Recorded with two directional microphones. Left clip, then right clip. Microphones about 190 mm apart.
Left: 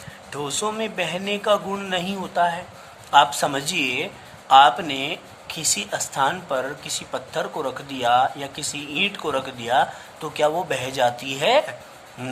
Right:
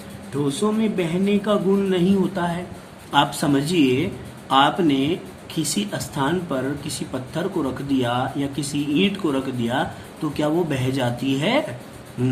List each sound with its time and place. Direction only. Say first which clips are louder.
0.3 s a man's voice: right 3 dB; 45° left (ahead or behind)